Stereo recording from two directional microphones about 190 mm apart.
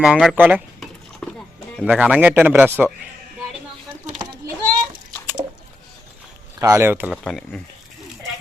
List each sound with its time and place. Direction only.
0.0 s speech: centre (ahead or behind)
1.2 s music: 5° left (ahead or behind)
1.8 s speech: 5° right (ahead or behind)
4.2 s a sound: 25° right (ahead or behind)
6.6 s speech: 15° right (ahead or behind)
7.3 s speech: 5° left (ahead or behind)